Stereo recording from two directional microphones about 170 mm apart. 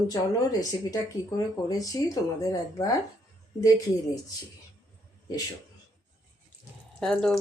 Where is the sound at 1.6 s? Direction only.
20° left (ahead or behind).